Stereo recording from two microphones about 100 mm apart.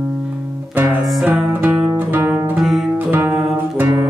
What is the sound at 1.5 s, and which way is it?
Music, 20° right (ahead or behind).